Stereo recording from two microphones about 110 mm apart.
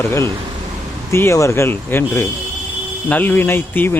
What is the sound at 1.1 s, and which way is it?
Speech, 25° left (ahead or behind).